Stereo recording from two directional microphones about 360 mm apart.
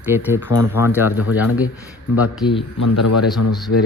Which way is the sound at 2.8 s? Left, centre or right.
Left.